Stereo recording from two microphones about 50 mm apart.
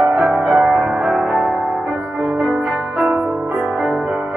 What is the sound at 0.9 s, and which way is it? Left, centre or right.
Music, centre.